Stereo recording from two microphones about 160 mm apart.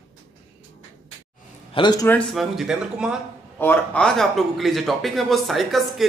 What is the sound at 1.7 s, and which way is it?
Speech, 30° left (ahead or behind).